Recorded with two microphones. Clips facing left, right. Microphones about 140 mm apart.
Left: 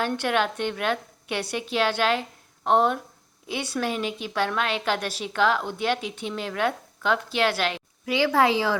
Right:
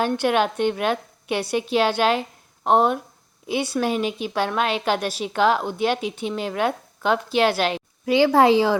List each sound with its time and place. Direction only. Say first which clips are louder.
0.2 s a woman's voice: right 5 dB; 15° right (ahead or behind)
8.0 s speech: right 5 dB; 30° right (ahead or behind)